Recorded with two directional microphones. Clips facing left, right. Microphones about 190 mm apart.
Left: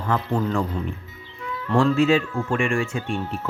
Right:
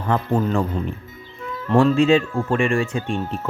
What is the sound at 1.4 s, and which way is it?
Music, 45° right (ahead or behind).